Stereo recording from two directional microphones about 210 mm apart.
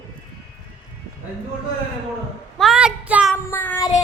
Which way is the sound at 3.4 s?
10° left (ahead or behind).